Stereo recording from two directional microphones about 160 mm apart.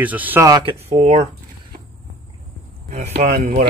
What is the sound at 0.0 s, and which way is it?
Speech, 10° right (ahead or behind).